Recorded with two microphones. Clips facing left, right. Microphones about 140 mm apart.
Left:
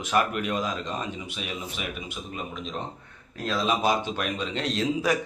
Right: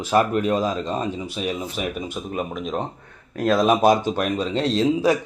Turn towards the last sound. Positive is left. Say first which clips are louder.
# right 7 dB
turn(degrees=-30)  # may be behind; listen again after turning